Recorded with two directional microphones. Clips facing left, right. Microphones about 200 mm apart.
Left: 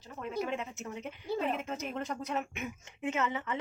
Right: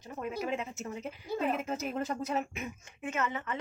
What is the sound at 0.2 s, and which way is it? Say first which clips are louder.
A woman's voice: even; 5° right (ahead or behind).